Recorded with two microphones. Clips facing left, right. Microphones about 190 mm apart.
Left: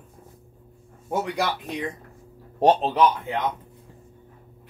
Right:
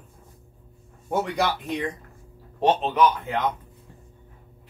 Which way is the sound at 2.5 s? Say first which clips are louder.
Left 3 dB; 40° left (ahead or behind).